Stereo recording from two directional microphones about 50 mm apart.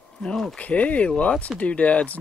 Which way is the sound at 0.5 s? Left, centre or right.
Left.